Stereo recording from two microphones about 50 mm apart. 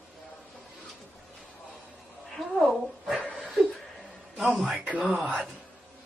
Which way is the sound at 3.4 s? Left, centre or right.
Centre.